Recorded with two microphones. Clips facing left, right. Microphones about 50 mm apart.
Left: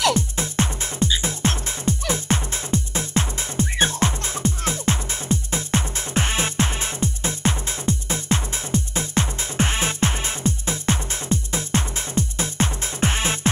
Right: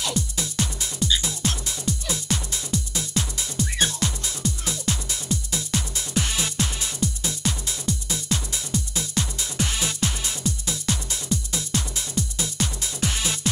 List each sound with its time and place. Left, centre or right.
0.1 s music: left